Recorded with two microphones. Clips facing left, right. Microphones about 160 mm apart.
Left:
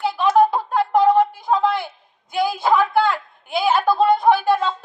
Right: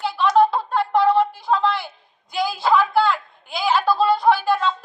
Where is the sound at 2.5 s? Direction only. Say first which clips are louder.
Even; 20° left (ahead or behind).